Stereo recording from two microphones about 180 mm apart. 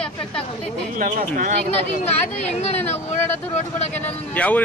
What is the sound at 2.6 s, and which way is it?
Speech, 40° left (ahead or behind).